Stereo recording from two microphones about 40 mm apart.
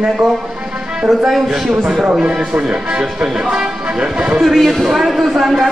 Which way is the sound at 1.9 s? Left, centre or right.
Centre.